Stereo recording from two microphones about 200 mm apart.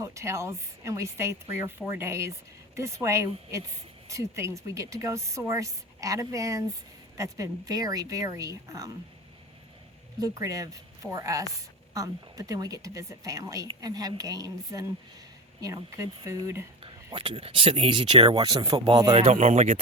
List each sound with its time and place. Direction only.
0.0 s a woman's voice: 15° right (ahead or behind)
10.2 s a woman's voice: 15° right (ahead or behind)
16.8 s speech: 25° right (ahead or behind)